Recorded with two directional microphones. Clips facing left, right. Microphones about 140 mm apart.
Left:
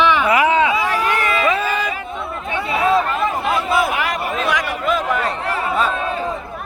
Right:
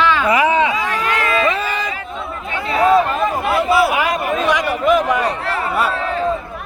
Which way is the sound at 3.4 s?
5° right (ahead or behind).